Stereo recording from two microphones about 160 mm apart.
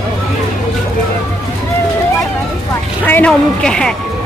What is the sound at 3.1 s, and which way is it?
Speech, 10° left (ahead or behind).